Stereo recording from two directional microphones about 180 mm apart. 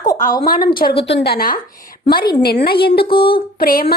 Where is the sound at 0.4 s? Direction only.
55° left (ahead or behind).